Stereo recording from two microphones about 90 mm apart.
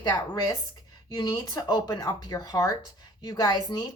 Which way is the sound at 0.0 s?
50° left (ahead or behind).